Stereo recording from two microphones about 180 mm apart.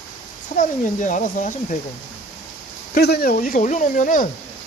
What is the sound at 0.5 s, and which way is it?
Speech, 45° left (ahead or behind).